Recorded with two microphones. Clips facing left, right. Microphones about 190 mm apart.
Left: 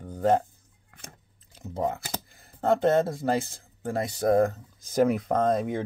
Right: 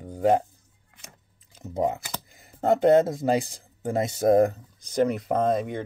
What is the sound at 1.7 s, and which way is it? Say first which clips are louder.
Speech: right 3 dB; 15° right (ahead or behind).